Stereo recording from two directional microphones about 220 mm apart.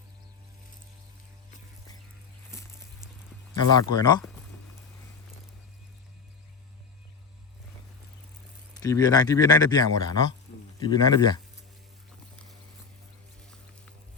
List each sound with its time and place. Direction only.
3.5 s speech: 20° left (ahead or behind)
8.8 s speech: 15° left (ahead or behind)
13.4 s music: 5° left (ahead or behind)